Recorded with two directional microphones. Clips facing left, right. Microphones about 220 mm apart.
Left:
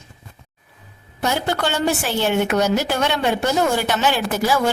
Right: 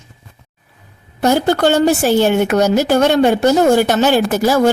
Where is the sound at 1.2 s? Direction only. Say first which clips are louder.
Right 9 dB; 40° right (ahead or behind).